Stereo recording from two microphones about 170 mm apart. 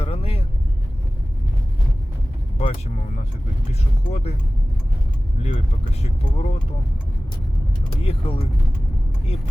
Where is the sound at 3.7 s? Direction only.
40° left (ahead or behind).